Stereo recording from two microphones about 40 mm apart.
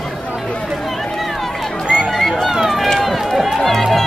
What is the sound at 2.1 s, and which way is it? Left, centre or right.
Run, centre.